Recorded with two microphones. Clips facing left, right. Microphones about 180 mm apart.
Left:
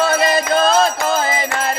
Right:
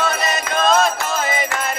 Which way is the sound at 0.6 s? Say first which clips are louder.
Right 2 dB; 35° left (ahead or behind).